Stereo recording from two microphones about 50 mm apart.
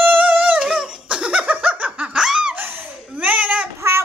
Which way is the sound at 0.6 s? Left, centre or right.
Centre.